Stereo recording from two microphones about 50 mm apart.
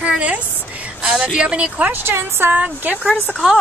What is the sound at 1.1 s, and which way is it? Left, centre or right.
Speech, centre.